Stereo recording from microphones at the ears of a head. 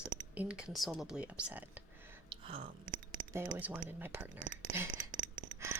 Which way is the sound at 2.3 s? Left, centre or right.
Right.